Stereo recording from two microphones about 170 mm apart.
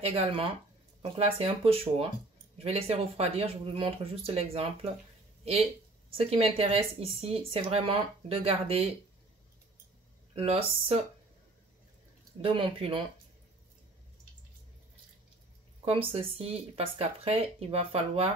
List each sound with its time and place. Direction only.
0.0 s speech: 30° right (ahead or behind)
6.1 s speech: 35° right (ahead or behind)
10.3 s speech: 35° right (ahead or behind)
12.4 s speech: 30° right (ahead or behind)
15.8 s speech: 35° right (ahead or behind)